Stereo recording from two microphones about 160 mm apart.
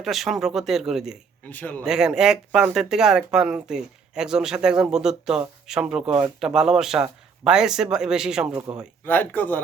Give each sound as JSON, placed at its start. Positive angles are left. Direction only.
{"t": 0.0, "sound": "speech", "side_deg": 0}
{"t": 1.5, "sound": "a man's voice", "side_deg": 10}
{"t": 1.8, "sound": "speech", "side_deg": -5}
{"t": 9.0, "sound": "a man's voice", "side_deg": 10}